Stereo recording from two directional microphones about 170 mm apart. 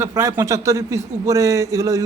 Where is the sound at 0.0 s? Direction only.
15° right (ahead or behind).